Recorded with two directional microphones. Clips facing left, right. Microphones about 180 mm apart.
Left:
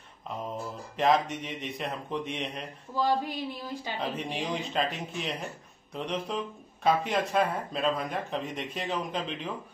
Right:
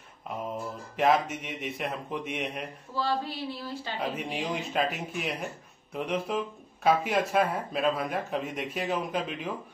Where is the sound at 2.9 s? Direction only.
15° left (ahead or behind).